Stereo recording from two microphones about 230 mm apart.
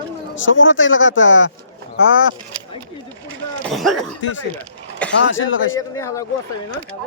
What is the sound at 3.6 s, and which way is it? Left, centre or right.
Speech, centre.